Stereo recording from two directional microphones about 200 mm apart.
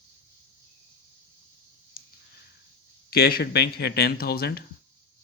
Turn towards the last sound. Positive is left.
turn(degrees=50)  # may be behind; listen again after turning